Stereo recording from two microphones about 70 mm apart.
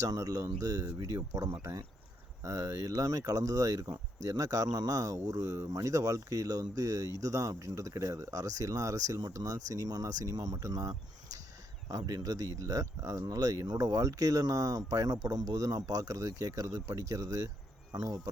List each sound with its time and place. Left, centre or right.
0.0 s speech: right